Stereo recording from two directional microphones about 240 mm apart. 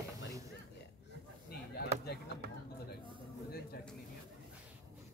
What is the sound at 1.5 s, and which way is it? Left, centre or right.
Chop, left.